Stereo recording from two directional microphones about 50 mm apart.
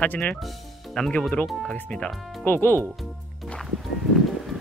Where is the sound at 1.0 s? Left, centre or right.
Centre.